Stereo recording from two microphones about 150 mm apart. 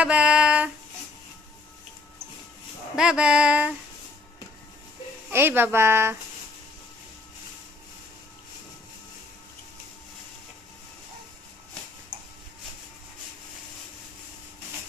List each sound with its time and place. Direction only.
0.0 s a sound: 5° right (ahead or behind)
3.0 s speech: 5° right (ahead or behind)
5.3 s speech: 15° right (ahead or behind)